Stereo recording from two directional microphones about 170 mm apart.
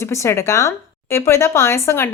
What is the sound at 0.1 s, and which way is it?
Speech, 15° left (ahead or behind).